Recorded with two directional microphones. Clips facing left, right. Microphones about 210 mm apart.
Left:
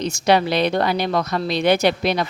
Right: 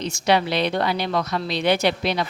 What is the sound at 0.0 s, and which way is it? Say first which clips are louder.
Speech: left 3 dB; 45° left (ahead or behind).